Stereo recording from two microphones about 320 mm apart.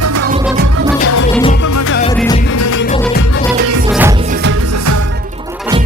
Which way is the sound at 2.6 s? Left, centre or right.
Left.